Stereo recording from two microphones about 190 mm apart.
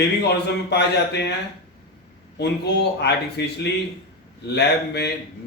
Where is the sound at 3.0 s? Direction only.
65° left (ahead or behind).